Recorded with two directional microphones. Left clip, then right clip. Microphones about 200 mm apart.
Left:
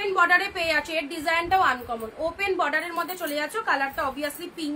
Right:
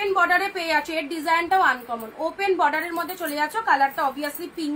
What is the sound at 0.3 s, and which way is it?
A woman's voice, 20° left (ahead or behind).